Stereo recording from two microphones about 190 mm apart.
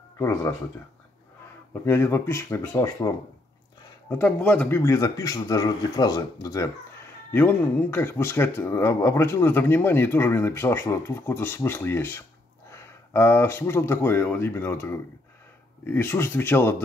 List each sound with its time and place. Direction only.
0.2 s speech: 15° left (ahead or behind)
1.7 s speech: 15° left (ahead or behind)
4.2 s speech: 5° left (ahead or behind)